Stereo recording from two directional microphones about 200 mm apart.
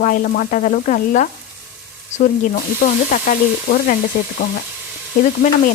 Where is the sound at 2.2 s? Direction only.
45° left (ahead or behind).